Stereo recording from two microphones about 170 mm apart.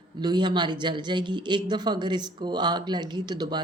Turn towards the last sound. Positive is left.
turn(degrees=-25)  # may be behind; listen again after turning